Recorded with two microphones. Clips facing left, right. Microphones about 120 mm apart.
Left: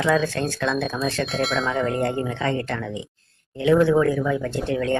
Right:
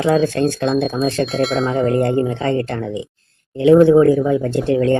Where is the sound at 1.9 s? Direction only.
30° right (ahead or behind).